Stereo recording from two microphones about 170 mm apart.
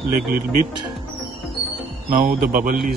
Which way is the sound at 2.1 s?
50° right (ahead or behind).